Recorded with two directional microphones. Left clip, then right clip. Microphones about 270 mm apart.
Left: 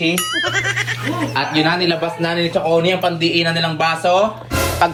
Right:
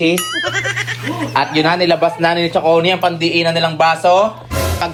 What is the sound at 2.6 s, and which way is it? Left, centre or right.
Speech, right.